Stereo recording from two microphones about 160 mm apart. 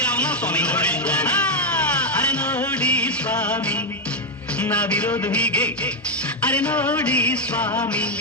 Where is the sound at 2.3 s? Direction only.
10° left (ahead or behind).